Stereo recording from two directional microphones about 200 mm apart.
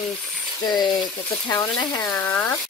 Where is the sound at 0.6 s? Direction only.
20° left (ahead or behind).